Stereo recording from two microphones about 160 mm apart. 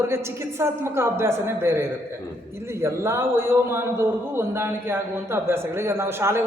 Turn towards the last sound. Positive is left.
turn(degrees=-15)  # may be behind; listen again after turning